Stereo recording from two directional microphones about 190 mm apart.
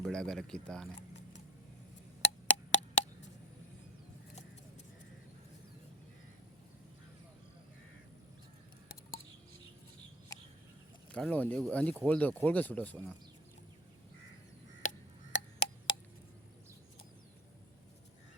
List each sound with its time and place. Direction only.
0.0 s speech: 5° left (ahead or behind)
2.5 s a sound: 70° left (ahead or behind)
11.1 s speech: 5° left (ahead or behind)
14.8 s tick-tock: 40° left (ahead or behind)